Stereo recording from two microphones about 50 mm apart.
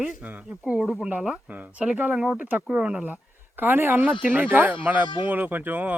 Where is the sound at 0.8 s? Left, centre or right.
Centre.